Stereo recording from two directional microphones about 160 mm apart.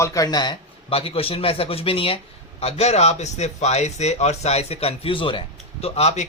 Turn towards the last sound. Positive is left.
turn(degrees=40)  # may be behind; listen again after turning